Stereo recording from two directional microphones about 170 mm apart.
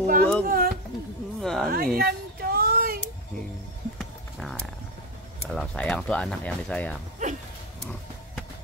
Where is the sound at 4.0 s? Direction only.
Centre (ahead or behind).